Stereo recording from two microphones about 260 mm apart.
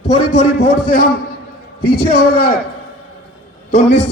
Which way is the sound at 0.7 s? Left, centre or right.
Left.